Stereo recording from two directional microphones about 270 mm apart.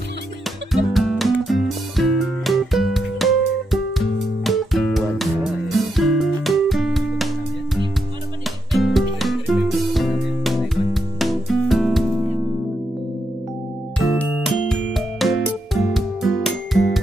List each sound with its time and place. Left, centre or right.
0.9 s music: centre
8.7 s music: centre
13.9 s music: centre